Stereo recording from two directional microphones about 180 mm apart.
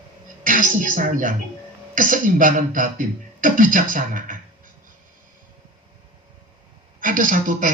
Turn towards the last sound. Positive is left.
turn(degrees=-45)  # may be behind; listen again after turning